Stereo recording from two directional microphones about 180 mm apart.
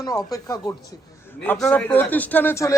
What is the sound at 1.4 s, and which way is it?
A man's voice, 5° left (ahead or behind).